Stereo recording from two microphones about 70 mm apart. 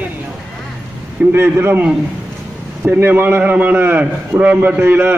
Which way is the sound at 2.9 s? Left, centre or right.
Right.